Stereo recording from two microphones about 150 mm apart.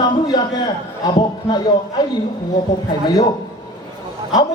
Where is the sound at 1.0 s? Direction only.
30° left (ahead or behind).